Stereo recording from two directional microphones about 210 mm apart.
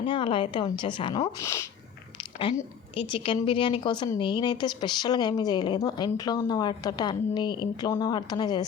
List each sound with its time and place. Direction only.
0.0 s a woman's voice: 25° left (ahead or behind)
2.9 s a woman's voice: 25° left (ahead or behind)